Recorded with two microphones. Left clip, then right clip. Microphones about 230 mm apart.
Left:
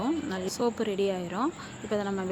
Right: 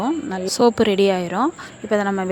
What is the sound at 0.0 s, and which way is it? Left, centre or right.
A woman's voice, right.